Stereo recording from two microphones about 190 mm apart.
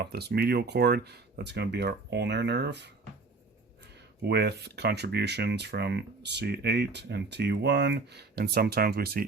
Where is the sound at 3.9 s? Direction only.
60° right (ahead or behind).